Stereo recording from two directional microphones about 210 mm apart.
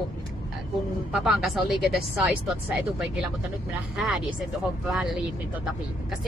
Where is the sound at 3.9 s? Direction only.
Centre (ahead or behind).